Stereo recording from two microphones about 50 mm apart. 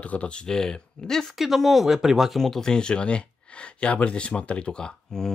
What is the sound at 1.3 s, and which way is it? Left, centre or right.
Speech, centre.